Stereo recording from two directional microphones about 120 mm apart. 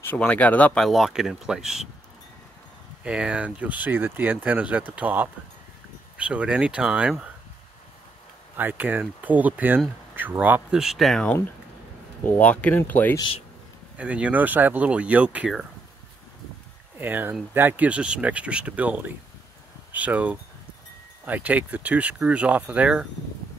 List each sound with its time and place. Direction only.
0.0 s speech: 15° left (ahead or behind)
0.8 s speech: centre (ahead or behind)
3.0 s speech: 10° right (ahead or behind)
8.5 s speech: 15° right (ahead or behind); by 11.2 s centre (ahead or behind)
12.3 s speech: 10° left (ahead or behind)
13.9 s speech: 10° right (ahead or behind)
17.0 s speech: 15° right (ahead or behind)